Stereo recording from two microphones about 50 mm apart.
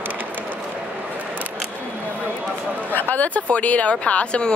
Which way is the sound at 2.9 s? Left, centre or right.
Left.